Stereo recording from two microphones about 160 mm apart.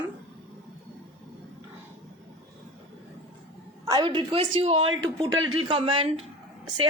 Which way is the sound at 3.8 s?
25° right (ahead or behind).